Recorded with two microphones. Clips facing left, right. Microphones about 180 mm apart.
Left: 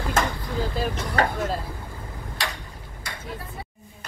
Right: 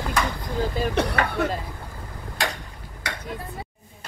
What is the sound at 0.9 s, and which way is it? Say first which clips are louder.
Speech: right 7 dB; 70° right (ahead or behind).